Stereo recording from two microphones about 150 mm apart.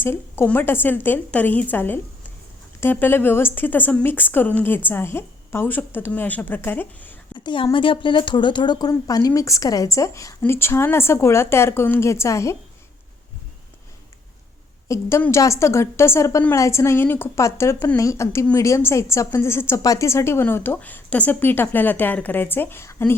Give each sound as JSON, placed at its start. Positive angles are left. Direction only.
{"t": 0.0, "sound": "a woman's voice", "side_deg": 15}
{"t": 7.3, "sound": "speech", "side_deg": 35}
{"t": 14.8, "sound": "a woman's voice", "side_deg": 20}